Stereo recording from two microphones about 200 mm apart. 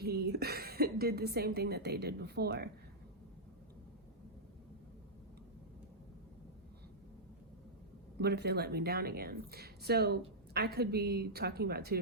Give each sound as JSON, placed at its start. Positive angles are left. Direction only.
{"t": 0.0, "sound": "a woman's voice", "side_deg": -55}
{"t": 8.2, "sound": "speech", "side_deg": -55}